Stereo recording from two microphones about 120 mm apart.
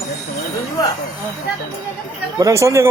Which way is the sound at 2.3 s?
25° right (ahead or behind).